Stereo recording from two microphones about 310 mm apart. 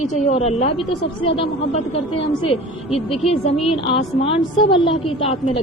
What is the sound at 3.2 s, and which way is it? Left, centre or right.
A woman's voice, centre.